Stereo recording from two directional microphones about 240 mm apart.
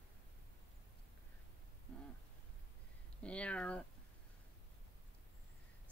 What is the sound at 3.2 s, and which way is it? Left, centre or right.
Speech, centre.